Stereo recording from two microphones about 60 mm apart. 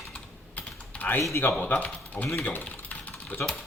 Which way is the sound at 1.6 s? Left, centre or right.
Left.